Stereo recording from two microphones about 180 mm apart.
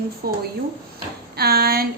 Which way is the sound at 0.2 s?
55° right (ahead or behind).